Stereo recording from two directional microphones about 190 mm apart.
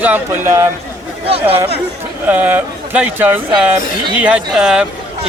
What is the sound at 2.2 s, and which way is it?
A man's voice, 10° right (ahead or behind).